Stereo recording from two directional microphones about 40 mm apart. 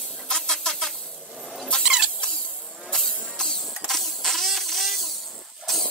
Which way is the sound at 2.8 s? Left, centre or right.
Centre.